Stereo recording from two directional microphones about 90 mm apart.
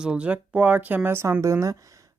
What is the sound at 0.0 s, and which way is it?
Speech, 15° right (ahead or behind).